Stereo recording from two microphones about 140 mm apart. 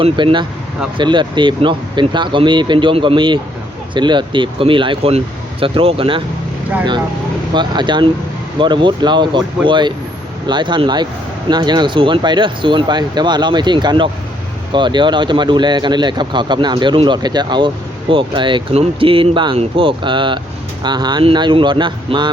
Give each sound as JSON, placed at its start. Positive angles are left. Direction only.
{"t": 0.0, "sound": "speech", "side_deg": -35}
{"t": 7.5, "sound": "speech", "side_deg": -35}